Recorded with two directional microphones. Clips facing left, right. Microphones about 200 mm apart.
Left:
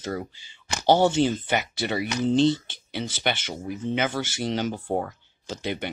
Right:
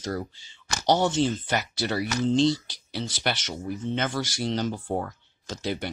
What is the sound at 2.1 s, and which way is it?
Speech, 15° left (ahead or behind).